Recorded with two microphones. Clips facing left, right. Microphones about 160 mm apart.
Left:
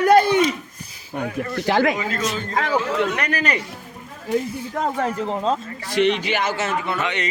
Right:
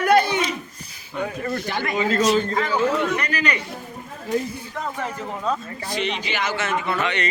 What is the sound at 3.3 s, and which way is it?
Speech, 35° left (ahead or behind).